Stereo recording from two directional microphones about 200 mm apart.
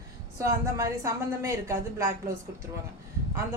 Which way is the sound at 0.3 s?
15° right (ahead or behind).